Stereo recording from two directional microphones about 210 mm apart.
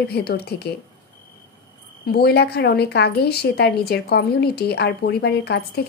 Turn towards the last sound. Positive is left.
turn(degrees=50)  # may be behind; listen again after turning